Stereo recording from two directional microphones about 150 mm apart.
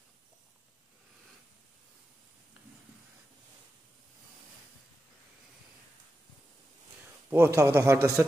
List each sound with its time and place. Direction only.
7.2 s a man's voice: 15° right (ahead or behind)